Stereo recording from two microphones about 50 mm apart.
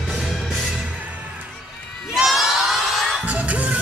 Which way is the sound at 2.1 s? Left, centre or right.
Centre.